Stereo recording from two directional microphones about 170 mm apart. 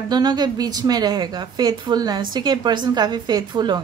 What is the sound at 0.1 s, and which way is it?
A woman's voice, 25° right (ahead or behind).